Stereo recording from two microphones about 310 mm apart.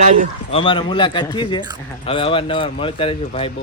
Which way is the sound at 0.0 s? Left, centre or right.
Right.